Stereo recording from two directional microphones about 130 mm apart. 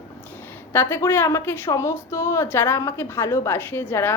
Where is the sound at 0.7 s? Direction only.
20° left (ahead or behind).